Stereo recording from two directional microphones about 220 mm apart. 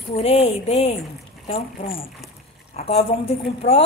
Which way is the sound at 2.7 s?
25° left (ahead or behind).